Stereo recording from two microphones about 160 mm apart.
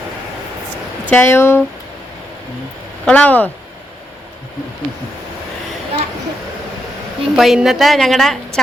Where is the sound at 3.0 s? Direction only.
10° left (ahead or behind).